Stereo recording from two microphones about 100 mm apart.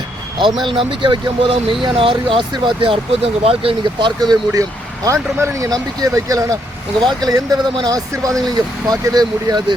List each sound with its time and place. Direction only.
0.6 s speech: 60° right (ahead or behind)
4.2 s speech: 45° right (ahead or behind)